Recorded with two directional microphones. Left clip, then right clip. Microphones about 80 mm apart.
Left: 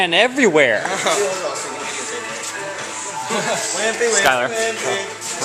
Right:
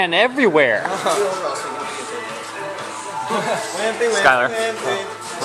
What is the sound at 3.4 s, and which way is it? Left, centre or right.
Speech, right.